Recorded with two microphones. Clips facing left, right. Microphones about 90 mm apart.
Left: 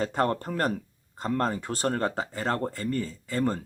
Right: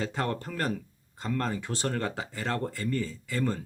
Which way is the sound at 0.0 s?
45° left (ahead or behind).